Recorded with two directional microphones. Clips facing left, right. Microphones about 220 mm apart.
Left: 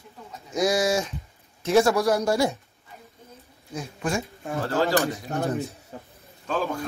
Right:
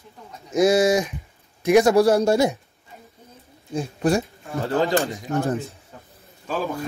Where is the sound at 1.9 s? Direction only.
30° right (ahead or behind).